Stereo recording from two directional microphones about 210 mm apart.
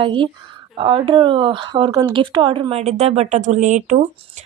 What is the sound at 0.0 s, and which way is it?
Speech, 25° right (ahead or behind).